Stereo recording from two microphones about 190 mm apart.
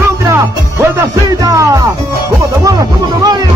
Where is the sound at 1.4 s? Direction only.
20° right (ahead or behind).